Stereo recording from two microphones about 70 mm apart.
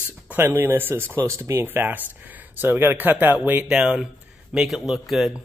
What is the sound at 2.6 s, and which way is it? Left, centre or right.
A man's voice, right.